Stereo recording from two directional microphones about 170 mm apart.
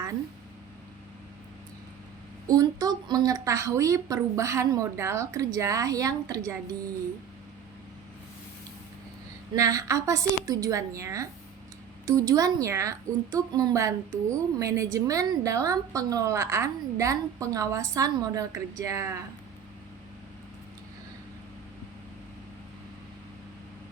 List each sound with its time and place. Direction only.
2.5 s a woman's voice: 25° right (ahead or behind)
9.6 s a woman's voice: 20° right (ahead or behind)